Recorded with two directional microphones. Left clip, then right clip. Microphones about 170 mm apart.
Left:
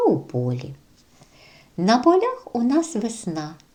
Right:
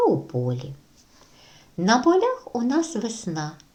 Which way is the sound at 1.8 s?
20° left (ahead or behind).